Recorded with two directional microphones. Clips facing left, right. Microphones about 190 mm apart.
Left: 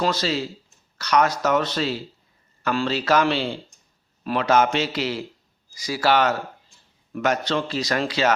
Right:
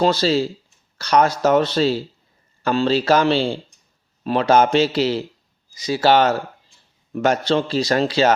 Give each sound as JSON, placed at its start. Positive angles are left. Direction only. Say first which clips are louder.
{"t": 0.0, "sound": "speech", "louder": "right 6 dB", "side_deg": -30}